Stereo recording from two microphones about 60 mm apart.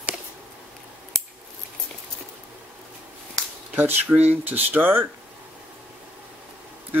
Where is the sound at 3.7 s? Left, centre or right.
Right.